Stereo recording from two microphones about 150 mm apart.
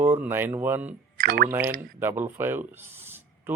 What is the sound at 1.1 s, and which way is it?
Speech, 80° right.